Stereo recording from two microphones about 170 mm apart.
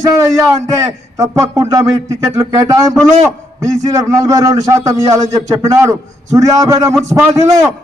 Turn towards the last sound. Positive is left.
turn(degrees=-20)  # may be behind; listen again after turning